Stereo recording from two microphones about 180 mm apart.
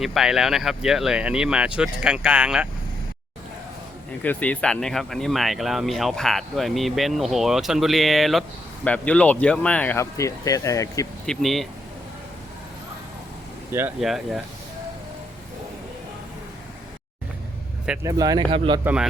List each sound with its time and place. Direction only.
0.0 s speech: centre (ahead or behind)
4.2 s speech: 10° left (ahead or behind)
11.3 s speech: centre (ahead or behind)
13.7 s speech: 10° right (ahead or behind)
14.0 s speech: centre (ahead or behind)
18.0 s speech: 20° right (ahead or behind)